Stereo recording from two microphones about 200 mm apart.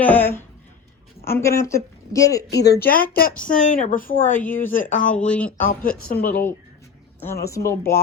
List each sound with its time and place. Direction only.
0.0 s speech: 10° left (ahead or behind)
2.5 s speech: 55° left (ahead or behind)
4.4 s speech: 10° left (ahead or behind)
4.6 s speech: 40° left (ahead or behind)
5.2 s speech: 5° left (ahead or behind)
5.5 s speech: 45° left (ahead or behind)
7.4 s speech: 15° left (ahead or behind)